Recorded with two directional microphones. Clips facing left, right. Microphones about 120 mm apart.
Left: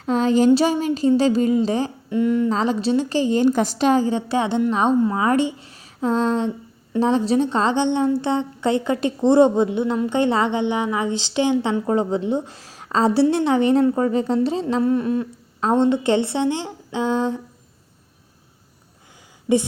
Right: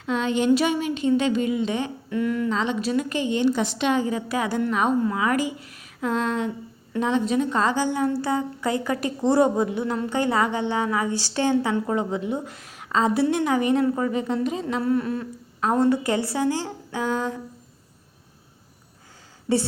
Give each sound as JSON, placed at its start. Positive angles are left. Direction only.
{"t": 0.0, "sound": "a woman's voice", "side_deg": 35}
{"t": 2.0, "sound": "a woman's voice", "side_deg": 25}
{"t": 2.5, "sound": "a woman's voice", "side_deg": 35}
{"t": 19.5, "sound": "a woman's voice", "side_deg": 15}